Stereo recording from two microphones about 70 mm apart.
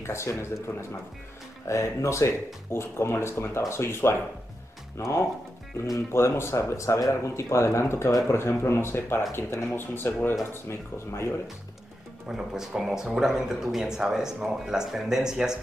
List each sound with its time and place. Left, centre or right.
0.0 s speech: left
12.3 s speech: centre